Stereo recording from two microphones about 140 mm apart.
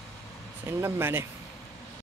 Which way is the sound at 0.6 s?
15° right (ahead or behind).